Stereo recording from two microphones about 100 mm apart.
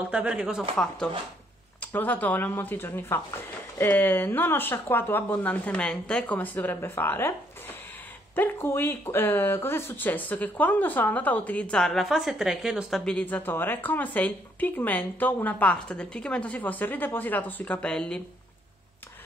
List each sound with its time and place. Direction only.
0.1 s a woman's voice: 10° right (ahead or behind)
0.7 s speech: 10° left (ahead or behind)
8.4 s speech: 25° left (ahead or behind); by 13.0 s 5° right (ahead or behind)
13.0 s speech: 15° left (ahead or behind)